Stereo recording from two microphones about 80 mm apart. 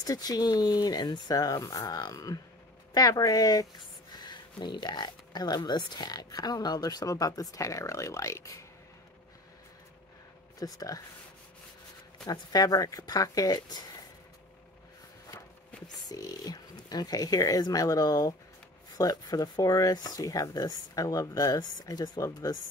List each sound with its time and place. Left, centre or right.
0.0 s speech: left
4.1 s speech: left
10.6 s speech: left
12.3 s speech: left
16.1 s speech: left